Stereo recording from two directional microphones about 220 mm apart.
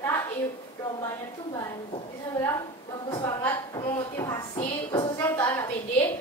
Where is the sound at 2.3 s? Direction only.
15° left (ahead or behind).